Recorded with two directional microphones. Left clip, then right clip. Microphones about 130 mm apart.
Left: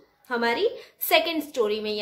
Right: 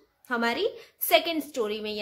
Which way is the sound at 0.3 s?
35° right (ahead or behind).